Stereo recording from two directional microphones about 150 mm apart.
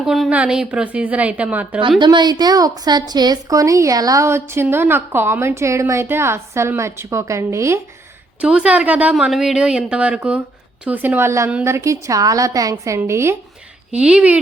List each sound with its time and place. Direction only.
0.0 s a woman's voice: centre (ahead or behind)
2.0 s a woman's voice: 30° right (ahead or behind)
8.4 s a woman's voice: 5° right (ahead or behind)
13.9 s a woman's voice: 5° right (ahead or behind)